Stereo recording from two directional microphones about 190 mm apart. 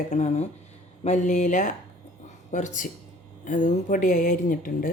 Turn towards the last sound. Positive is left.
turn(degrees=45)  # may be behind; listen again after turning